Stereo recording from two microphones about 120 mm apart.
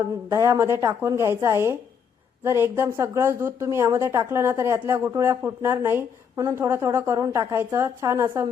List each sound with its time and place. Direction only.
0.3 s a woman's voice: 25° right (ahead or behind)